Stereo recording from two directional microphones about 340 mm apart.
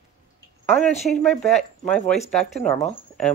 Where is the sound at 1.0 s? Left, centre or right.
Centre.